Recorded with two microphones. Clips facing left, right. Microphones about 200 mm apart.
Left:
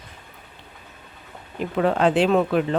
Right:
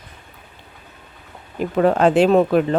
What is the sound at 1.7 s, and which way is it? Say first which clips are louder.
Speech: right 4 dB; 45° right (ahead or behind).